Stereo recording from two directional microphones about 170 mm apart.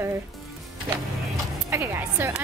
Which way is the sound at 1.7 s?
15° right (ahead or behind).